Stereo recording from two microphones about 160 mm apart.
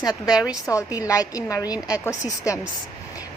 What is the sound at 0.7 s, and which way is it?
A woman's voice, 20° left (ahead or behind).